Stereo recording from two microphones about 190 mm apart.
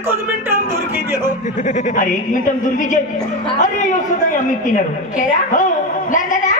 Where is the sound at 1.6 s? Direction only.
40° left (ahead or behind).